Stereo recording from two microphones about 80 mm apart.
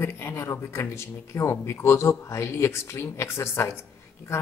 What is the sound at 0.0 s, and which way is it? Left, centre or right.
Speech, left.